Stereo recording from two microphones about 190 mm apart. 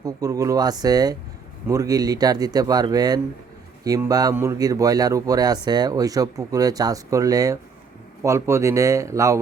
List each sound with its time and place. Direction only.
0.0 s speech: 20° right (ahead or behind)